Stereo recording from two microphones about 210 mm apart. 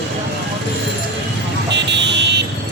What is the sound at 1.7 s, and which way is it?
Vehicle, 55° right (ahead or behind).